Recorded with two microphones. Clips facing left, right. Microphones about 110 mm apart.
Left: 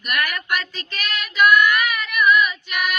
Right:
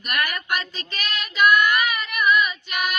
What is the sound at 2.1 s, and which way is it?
Female singing, 30° right (ahead or behind).